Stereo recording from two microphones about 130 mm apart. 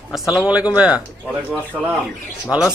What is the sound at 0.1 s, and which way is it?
Speech, centre (ahead or behind).